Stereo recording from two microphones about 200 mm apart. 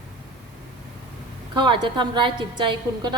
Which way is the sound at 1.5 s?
25° right (ahead or behind).